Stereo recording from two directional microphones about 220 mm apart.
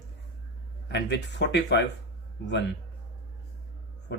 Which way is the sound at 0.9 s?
50° left (ahead or behind).